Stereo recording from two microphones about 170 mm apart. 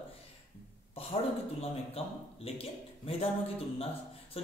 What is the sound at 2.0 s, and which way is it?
Speech, 35° left (ahead or behind).